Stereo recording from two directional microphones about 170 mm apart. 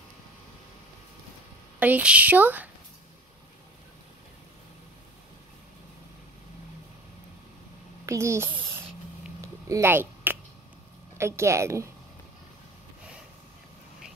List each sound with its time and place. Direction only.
1.8 s a woman's voice: 10° right (ahead or behind)
8.0 s a child's voice: 15° right (ahead or behind)
9.4 s a sound: 15° right (ahead or behind)
11.1 s a woman's voice: 15° right (ahead or behind)